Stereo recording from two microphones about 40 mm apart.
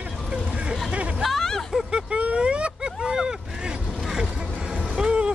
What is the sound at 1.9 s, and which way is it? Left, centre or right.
Vehicle, right.